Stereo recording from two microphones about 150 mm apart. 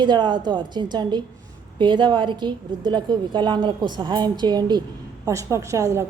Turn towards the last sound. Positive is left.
turn(degrees=-20)  # may be behind; listen again after turning